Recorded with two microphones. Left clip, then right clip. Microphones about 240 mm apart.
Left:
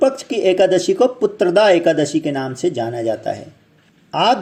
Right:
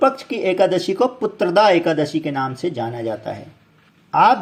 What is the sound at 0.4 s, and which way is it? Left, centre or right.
Speech, centre.